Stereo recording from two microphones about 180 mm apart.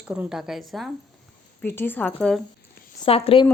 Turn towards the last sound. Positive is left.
turn(degrees=30)  # may be behind; listen again after turning